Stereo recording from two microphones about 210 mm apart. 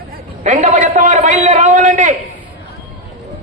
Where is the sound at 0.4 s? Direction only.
35° right (ahead or behind).